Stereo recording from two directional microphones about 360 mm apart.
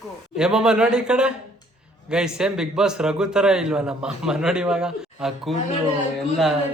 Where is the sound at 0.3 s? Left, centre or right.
Centre.